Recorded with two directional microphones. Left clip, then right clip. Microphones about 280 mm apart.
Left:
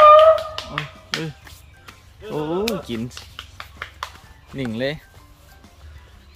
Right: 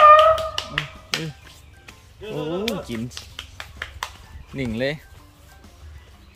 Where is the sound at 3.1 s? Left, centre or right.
Right.